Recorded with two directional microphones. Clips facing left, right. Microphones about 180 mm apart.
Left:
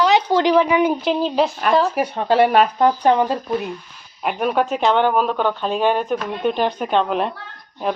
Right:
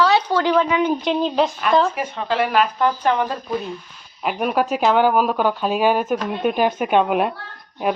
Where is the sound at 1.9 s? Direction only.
40° left (ahead or behind).